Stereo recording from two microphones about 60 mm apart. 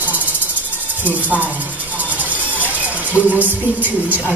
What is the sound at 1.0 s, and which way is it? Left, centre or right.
Speech, right.